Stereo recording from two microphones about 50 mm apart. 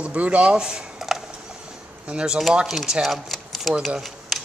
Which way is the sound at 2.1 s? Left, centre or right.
Right.